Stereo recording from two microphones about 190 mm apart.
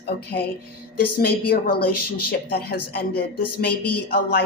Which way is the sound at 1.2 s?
55° left (ahead or behind).